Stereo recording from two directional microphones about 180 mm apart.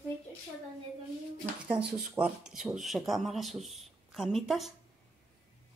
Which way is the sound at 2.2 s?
5° right (ahead or behind).